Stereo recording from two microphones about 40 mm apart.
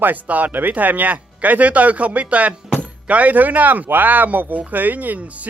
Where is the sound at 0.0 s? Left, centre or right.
Right.